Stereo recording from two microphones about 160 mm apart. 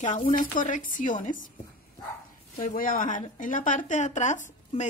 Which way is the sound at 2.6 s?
60° left (ahead or behind).